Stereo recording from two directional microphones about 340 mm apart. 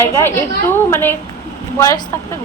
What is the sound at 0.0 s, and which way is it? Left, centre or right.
A woman's voice, centre.